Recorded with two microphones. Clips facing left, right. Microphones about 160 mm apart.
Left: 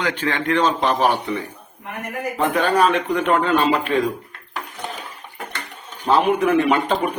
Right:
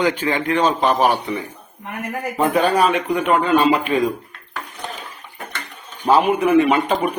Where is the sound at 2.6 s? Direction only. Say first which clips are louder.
Right 1 dB; 10° right (ahead or behind).